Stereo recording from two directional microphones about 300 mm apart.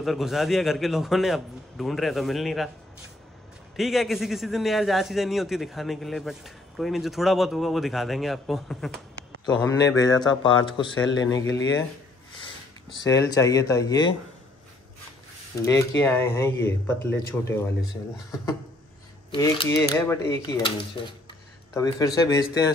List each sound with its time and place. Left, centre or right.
0.0 s a man's voice: centre
3.7 s a man's voice: centre
9.9 s speech: centre
11.1 s speech: left
13.0 s speech: centre
15.6 s speech: centre
19.3 s speech: centre